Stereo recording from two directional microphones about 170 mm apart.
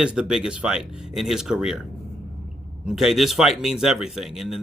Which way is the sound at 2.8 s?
Centre (ahead or behind).